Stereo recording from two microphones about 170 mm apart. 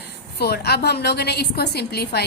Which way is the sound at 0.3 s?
70° left (ahead or behind).